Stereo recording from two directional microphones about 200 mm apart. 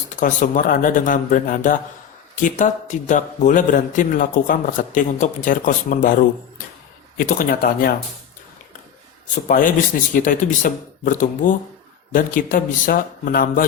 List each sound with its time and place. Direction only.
0.2 s a man's voice: 40° left (ahead or behind)
9.3 s a man's voice: 40° left (ahead or behind)